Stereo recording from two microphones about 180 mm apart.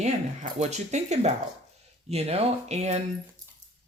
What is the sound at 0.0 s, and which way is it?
A woman's voice, 40° right (ahead or behind).